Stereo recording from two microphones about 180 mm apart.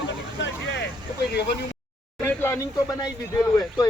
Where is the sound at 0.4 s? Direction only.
75° left (ahead or behind).